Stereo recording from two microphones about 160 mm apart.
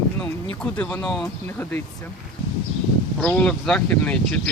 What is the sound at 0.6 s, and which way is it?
Speech, 10° left (ahead or behind).